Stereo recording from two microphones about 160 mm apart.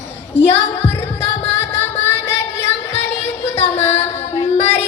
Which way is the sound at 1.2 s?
15° left (ahead or behind).